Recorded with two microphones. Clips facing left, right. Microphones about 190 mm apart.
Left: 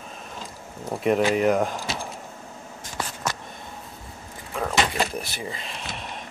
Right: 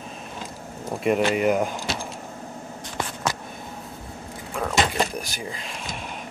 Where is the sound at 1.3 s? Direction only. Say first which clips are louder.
Left 1 dB; 5° right (ahead or behind).